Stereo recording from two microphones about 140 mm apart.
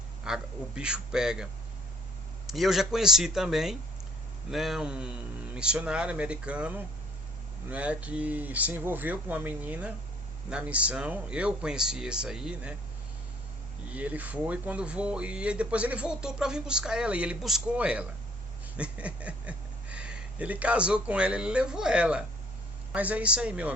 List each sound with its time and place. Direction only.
0.3 s a man's voice: 5° right (ahead or behind)
2.5 s a man's voice: centre (ahead or behind)
13.9 s speech: 10° right (ahead or behind)